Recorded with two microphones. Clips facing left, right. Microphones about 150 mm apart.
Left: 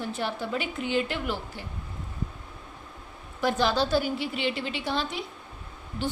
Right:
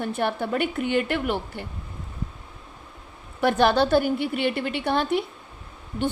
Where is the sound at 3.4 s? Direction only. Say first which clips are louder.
Right 5 dB; 60° right (ahead or behind).